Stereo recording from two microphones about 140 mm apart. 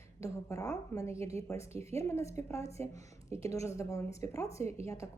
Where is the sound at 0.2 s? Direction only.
20° left (ahead or behind).